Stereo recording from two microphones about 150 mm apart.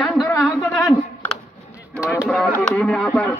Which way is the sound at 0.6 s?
Centre (ahead or behind).